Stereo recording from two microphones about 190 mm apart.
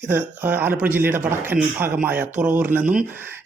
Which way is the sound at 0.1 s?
10° right (ahead or behind).